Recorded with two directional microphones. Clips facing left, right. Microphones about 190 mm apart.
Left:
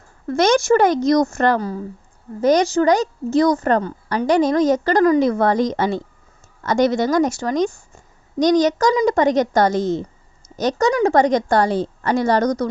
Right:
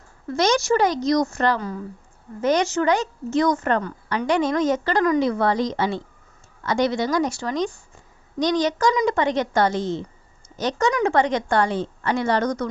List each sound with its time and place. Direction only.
0.3 s a woman's voice: 55° left (ahead or behind)
2.4 s a woman's voice: 40° left (ahead or behind)